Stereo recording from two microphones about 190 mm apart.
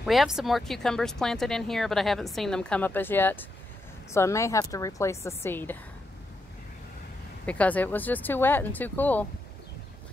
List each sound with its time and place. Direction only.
0.0 s speech: centre (ahead or behind)
7.4 s speech: 5° left (ahead or behind)